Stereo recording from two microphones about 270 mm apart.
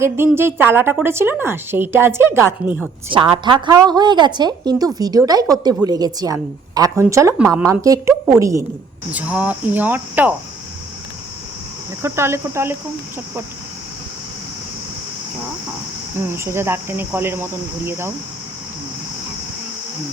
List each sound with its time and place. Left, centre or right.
0.0 s a woman's voice: centre
3.3 s a woman's voice: centre
12.0 s a woman's voice: centre
16.2 s a woman's voice: centre